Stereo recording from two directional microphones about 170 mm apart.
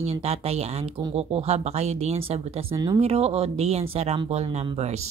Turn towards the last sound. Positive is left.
turn(degrees=-40)  # may be behind; listen again after turning